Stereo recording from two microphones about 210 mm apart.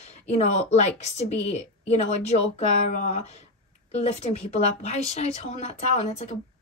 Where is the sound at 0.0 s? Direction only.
30° left (ahead or behind).